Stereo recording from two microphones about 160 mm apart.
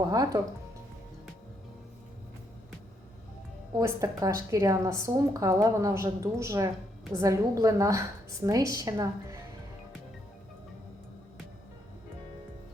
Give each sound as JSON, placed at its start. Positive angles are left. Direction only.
{"t": 0.0, "sound": "a woman's voice", "side_deg": -25}
{"t": 3.8, "sound": "a woman's voice", "side_deg": -20}